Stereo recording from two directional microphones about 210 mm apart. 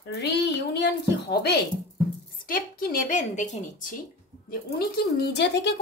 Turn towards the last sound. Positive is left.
turn(degrees=55)  # may be behind; listen again after turning